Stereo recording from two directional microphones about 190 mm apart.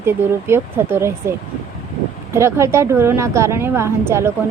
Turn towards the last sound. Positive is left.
turn(degrees=-15)  # may be behind; listen again after turning